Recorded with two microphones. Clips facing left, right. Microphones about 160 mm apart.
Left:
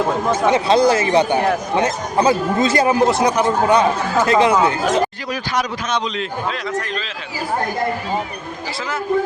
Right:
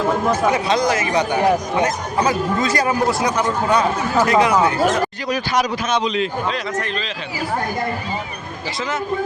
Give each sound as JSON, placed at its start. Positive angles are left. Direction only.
{"t": 0.3, "sound": "speech", "side_deg": 30}
{"t": 5.3, "sound": "a man's voice", "side_deg": -15}
{"t": 6.1, "sound": "a man's voice", "side_deg": 0}